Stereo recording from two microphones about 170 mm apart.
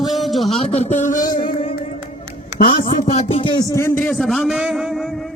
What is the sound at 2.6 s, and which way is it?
A man's voice, 30° left (ahead or behind).